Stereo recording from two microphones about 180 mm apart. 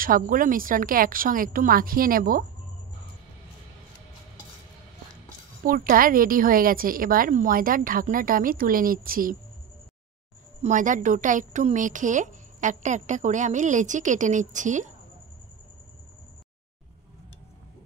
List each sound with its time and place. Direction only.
0.0 s a woman's voice: 50° right (ahead or behind)
5.6 s a woman's voice: 50° right (ahead or behind)
10.6 s a woman's voice: 45° right (ahead or behind)